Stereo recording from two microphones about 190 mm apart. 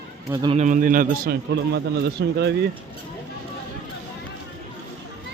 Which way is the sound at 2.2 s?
65° right (ahead or behind).